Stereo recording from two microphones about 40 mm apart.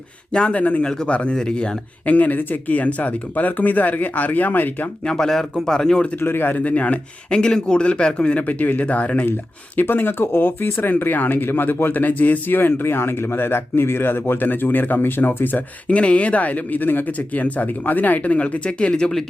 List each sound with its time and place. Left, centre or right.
0.3 s speech: left
2.0 s speech: left
5.0 s speech: centre
6.1 s speech: left
6.6 s speech: left
7.3 s speech: left
9.8 s speech: left
15.9 s speech: left
17.1 s speech: left